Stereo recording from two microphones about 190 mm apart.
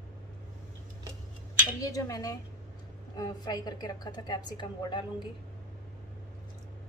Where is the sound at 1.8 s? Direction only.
20° left (ahead or behind).